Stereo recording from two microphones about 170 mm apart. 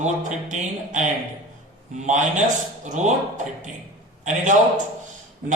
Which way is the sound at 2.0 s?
45° right (ahead or behind).